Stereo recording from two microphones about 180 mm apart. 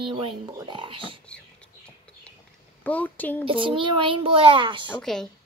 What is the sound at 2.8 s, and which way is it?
Speech, 10° left (ahead or behind).